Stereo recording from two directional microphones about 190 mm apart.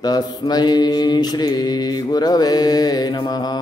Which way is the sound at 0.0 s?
20° left (ahead or behind).